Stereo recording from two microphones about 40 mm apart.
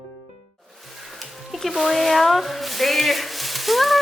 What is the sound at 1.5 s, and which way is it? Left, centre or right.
Speech, centre.